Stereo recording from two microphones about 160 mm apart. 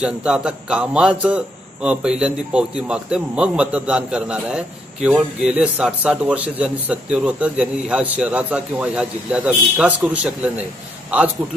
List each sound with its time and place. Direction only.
0.0 s a man's voice: 5° right (ahead or behind)